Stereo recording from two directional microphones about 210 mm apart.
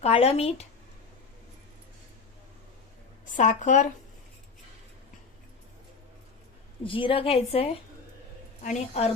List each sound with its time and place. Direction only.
0.0 s a woman's voice: 30° left (ahead or behind)
3.3 s speech: 35° left (ahead or behind)
6.8 s a woman's voice: 25° left (ahead or behind)